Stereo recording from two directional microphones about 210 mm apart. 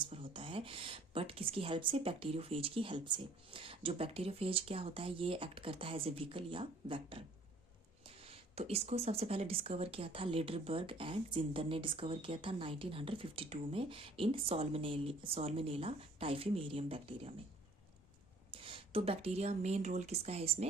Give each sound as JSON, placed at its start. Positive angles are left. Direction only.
{"t": 0.0, "sound": "a woman's voice", "side_deg": -25}
{"t": 18.5, "sound": "speech", "side_deg": -25}